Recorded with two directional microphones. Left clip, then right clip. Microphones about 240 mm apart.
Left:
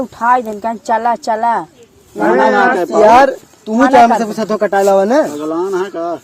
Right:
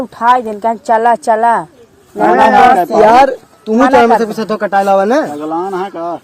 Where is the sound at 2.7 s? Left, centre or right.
Centre.